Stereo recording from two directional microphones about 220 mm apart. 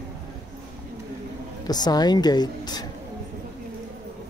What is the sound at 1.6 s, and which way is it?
Speech, 20° left (ahead or behind).